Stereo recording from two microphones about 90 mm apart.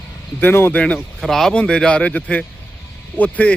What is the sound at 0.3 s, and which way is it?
Speech, 25° left (ahead or behind).